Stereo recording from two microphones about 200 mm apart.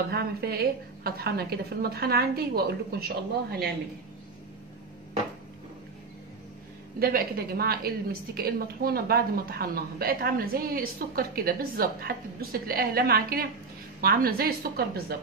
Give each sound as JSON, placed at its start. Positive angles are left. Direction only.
{"t": 0.1, "sound": "a woman's voice", "side_deg": -50}
{"t": 7.0, "sound": "a woman's voice", "side_deg": -50}